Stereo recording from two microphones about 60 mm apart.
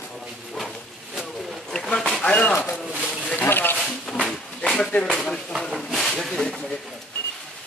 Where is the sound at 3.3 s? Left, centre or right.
Left.